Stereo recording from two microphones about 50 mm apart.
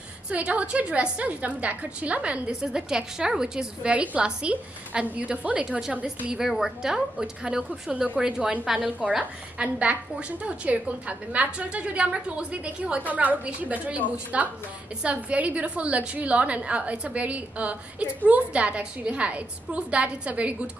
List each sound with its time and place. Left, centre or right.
0.3 s a woman's voice: right
3.9 s a woman's voice: right
5.7 s a woman's voice: centre
9.2 s a woman's voice: right